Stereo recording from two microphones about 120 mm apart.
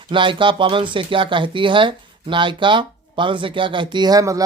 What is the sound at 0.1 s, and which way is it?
Speech, 45° right (ahead or behind).